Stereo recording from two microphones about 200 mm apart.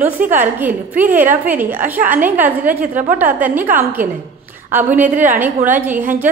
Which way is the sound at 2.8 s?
40° right (ahead or behind).